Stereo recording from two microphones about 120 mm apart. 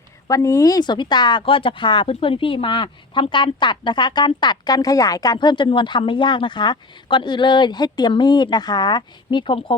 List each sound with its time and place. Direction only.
0.3 s speech: 30° left (ahead or behind); by 9.7 s 45° left (ahead or behind)